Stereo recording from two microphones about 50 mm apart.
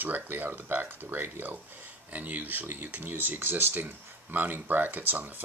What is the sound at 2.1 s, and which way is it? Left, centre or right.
Speech, right.